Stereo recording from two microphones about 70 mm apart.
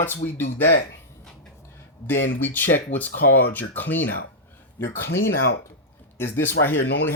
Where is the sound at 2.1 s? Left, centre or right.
Left.